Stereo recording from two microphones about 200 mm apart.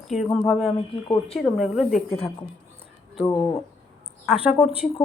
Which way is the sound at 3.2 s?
15° left (ahead or behind).